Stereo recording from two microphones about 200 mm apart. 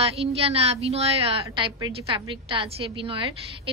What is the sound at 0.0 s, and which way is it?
A woman's voice, 30° right (ahead or behind).